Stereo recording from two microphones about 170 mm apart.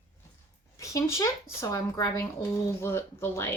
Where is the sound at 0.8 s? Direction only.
20° left (ahead or behind).